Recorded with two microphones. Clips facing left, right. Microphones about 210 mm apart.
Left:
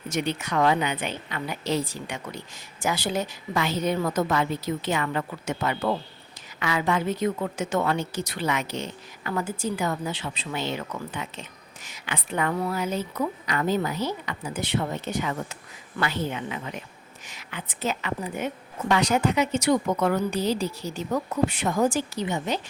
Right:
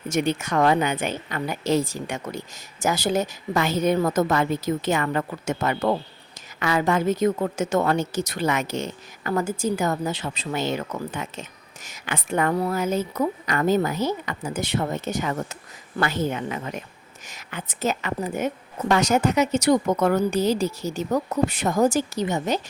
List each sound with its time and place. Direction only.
0.1 s a woman's voice: 45° right (ahead or behind)